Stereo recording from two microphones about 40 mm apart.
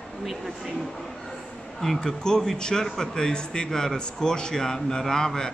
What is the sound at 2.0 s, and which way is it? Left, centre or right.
A man's voice, centre.